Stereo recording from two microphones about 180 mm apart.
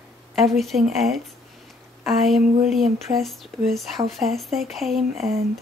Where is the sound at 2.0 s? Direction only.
Centre (ahead or behind).